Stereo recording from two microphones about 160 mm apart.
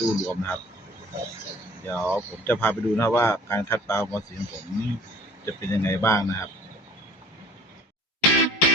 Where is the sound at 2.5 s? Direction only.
15° left (ahead or behind).